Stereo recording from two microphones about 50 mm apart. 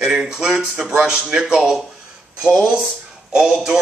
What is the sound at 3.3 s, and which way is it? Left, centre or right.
Speech, centre.